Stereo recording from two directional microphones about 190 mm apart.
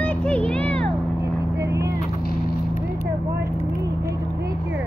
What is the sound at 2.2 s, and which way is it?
Vehicle, 50° left (ahead or behind).